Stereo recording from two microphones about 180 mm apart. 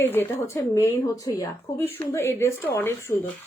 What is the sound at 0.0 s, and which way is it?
Speech, 10° left (ahead or behind).